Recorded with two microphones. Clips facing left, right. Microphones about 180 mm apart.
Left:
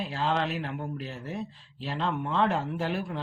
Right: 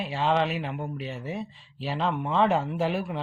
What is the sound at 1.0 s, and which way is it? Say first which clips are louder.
Speech: right 3 dB; 90° right.